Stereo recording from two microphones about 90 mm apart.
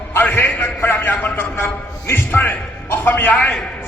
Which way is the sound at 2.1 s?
25° left (ahead or behind).